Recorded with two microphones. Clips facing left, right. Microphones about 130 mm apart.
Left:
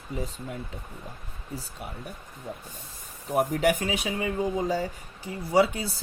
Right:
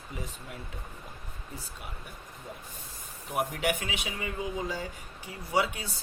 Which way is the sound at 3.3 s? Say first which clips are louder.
Left 6 dB; 40° left (ahead or behind).